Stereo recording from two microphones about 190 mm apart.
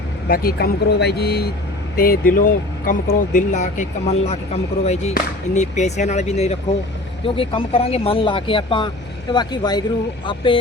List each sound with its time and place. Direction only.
0.3 s speech: 55° left (ahead or behind); by 10.6 s 25° left (ahead or behind)